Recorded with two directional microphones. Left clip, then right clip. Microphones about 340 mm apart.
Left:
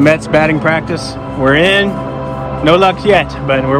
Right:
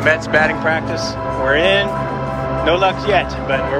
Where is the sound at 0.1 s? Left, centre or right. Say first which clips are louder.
Left 4 dB; centre.